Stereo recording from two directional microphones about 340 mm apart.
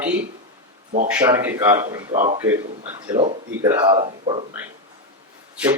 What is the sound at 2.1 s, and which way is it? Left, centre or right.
Speech, right.